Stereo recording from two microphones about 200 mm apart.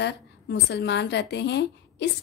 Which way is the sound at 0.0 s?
60° left (ahead or behind).